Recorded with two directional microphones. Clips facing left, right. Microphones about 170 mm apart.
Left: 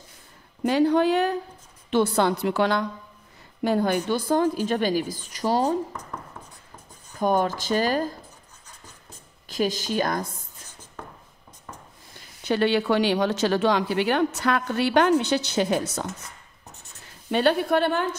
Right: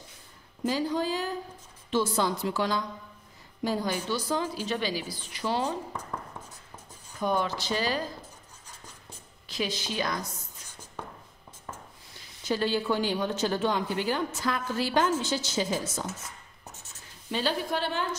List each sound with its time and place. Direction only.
0.7 s a woman's voice: 65° left (ahead or behind); by 5.8 s 40° left (ahead or behind)
7.2 s a woman's voice: 45° left (ahead or behind)
9.5 s a woman's voice: 45° left (ahead or behind)
12.4 s a woman's voice: 65° left (ahead or behind)
17.3 s a woman's voice: 60° left (ahead or behind)